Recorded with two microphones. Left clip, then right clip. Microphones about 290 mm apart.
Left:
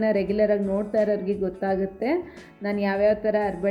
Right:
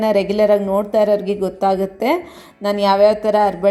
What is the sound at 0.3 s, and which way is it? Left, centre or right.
Speech, centre.